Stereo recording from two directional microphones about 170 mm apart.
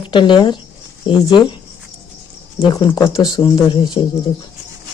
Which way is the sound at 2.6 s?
25° left (ahead or behind).